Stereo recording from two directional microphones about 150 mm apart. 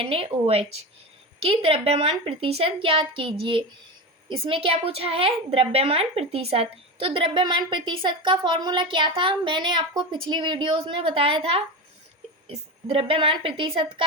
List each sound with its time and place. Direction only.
0.0 s a woman's voice: 40° right (ahead or behind)